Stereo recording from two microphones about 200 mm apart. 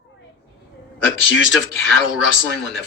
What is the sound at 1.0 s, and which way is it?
A man's voice, 75° left (ahead or behind).